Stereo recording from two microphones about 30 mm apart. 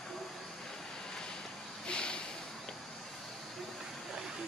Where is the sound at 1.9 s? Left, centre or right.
Left.